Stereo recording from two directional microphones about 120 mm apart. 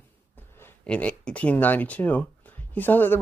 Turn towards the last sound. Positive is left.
turn(degrees=15)  # may be behind; listen again after turning